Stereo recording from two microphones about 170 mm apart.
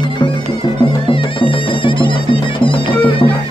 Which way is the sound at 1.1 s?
30° left (ahead or behind).